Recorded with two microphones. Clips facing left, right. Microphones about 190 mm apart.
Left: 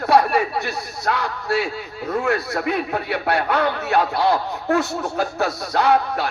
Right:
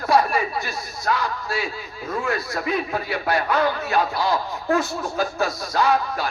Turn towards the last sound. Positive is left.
turn(degrees=65)  # may be behind; listen again after turning